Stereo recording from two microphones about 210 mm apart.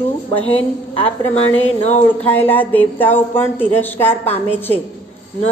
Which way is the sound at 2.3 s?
10° left (ahead or behind).